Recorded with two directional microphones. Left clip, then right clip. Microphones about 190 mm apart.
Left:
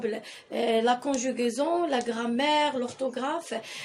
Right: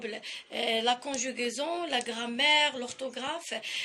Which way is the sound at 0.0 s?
40° left (ahead or behind).